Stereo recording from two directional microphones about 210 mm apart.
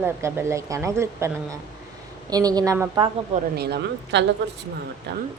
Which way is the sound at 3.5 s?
50° right (ahead or behind).